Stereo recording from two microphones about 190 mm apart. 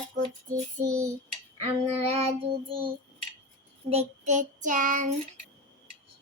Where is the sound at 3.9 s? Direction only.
35° right (ahead or behind).